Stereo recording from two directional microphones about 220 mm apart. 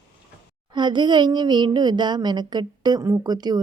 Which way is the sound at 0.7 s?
20° right (ahead or behind).